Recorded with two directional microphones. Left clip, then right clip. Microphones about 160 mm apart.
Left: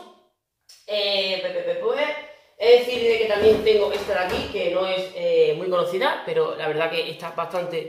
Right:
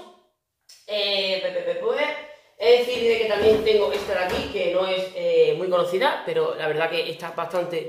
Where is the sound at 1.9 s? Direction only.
Centre (ahead or behind).